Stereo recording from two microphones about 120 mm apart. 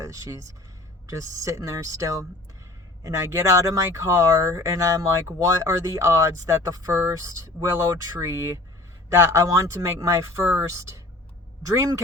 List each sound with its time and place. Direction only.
0.0 s speech: 25° right (ahead or behind)